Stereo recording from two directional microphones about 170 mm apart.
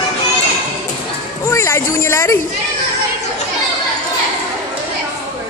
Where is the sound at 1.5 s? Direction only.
15° left (ahead or behind).